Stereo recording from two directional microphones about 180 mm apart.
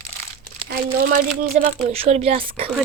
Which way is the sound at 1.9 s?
35° right (ahead or behind).